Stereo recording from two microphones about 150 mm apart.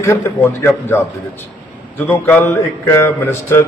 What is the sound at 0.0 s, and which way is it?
A man's voice, 20° left (ahead or behind).